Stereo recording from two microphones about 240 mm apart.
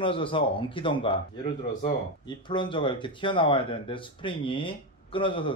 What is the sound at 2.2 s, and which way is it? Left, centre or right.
Speech, centre.